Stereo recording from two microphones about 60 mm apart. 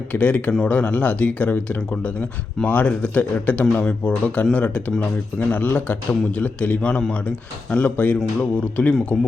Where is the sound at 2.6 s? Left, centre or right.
Left.